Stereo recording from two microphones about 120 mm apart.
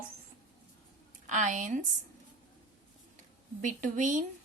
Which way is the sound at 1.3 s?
90° right.